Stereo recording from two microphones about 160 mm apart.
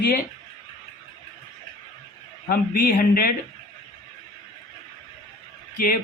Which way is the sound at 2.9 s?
60° left (ahead or behind).